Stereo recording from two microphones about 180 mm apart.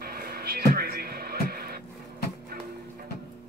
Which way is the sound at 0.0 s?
55° right (ahead or behind).